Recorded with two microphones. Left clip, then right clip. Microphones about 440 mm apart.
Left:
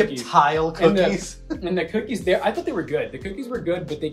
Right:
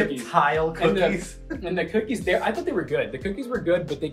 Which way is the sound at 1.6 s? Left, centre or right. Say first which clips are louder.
Even; centre.